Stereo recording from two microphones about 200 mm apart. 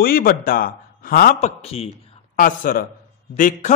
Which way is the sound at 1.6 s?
30° left (ahead or behind).